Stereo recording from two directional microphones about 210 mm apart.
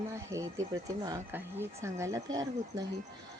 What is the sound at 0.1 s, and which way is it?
A woman's voice, 15° right (ahead or behind).